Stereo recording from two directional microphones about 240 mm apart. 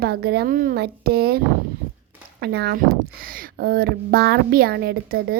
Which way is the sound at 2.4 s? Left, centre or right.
Right.